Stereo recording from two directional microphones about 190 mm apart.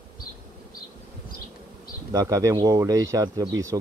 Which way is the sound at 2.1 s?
15° right (ahead or behind).